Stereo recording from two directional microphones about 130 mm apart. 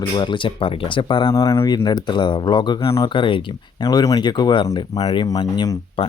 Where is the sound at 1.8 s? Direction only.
35° left (ahead or behind).